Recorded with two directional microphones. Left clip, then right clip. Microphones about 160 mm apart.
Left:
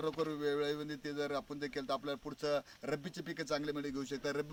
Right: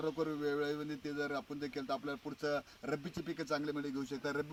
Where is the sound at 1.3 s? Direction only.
10° left (ahead or behind).